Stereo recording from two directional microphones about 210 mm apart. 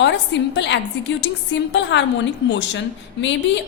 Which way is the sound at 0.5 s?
55° left (ahead or behind).